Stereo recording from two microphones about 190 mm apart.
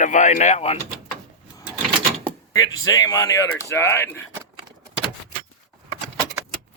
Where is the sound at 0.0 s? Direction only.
40° left (ahead or behind).